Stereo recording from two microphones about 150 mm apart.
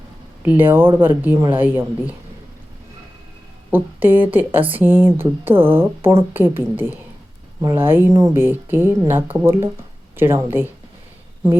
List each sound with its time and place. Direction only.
0.4 s a woman's voice: 15° right (ahead or behind)
3.7 s a woman's voice: 15° right (ahead or behind)